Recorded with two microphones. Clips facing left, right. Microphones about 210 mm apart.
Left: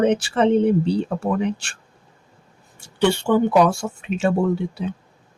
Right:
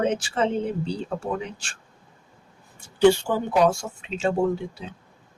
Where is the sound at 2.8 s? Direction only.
65° left (ahead or behind).